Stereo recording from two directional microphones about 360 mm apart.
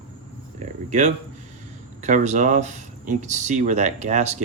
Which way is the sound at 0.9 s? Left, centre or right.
Centre.